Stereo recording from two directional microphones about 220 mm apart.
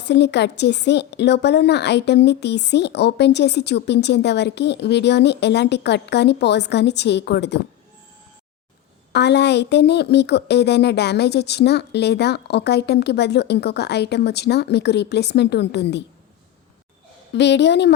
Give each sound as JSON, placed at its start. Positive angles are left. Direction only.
{"t": 0.0, "sound": "a woman's voice", "side_deg": 50}
{"t": 9.1, "sound": "a woman's voice", "side_deg": 50}
{"t": 17.3, "sound": "a woman's voice", "side_deg": 50}